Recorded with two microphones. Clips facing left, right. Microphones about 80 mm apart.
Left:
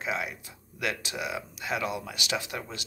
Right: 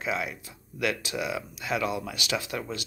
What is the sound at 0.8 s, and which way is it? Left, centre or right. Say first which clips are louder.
Speech: right 3 dB; left.